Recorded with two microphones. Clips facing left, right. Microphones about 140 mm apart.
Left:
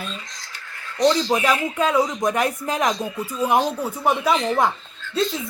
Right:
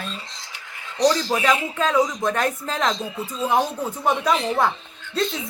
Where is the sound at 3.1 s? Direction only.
30° right (ahead or behind).